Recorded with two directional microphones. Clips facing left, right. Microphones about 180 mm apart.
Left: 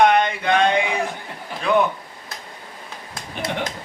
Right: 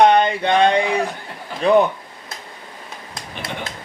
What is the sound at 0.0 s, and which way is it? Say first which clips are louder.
Male singing: right 3 dB; 35° right (ahead or behind).